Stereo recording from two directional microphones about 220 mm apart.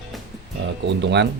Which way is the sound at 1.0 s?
50° right (ahead or behind).